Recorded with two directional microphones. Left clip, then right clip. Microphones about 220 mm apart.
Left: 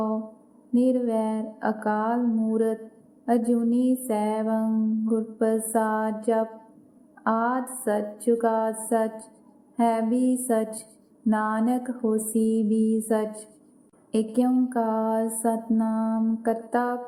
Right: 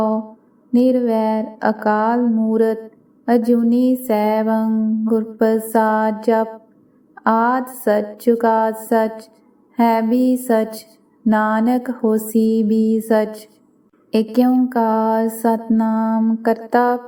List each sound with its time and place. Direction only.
0.7 s a woman's voice: 35° right (ahead or behind)